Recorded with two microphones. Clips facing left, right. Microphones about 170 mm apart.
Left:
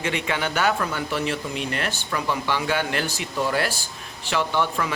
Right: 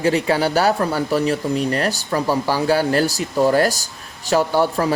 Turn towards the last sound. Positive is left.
turn(degrees=-40)  # may be behind; listen again after turning